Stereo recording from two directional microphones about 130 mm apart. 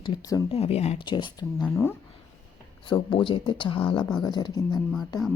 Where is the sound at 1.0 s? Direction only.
35° left (ahead or behind).